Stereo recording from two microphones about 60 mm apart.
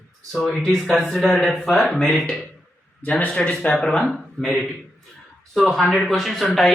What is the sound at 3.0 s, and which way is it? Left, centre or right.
Speech, left.